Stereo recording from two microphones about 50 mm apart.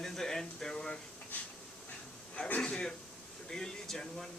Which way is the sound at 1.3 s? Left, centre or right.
Left.